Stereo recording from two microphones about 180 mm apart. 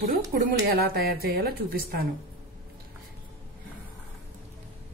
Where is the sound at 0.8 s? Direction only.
60° right (ahead or behind).